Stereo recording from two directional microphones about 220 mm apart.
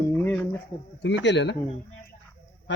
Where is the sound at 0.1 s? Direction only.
5° left (ahead or behind).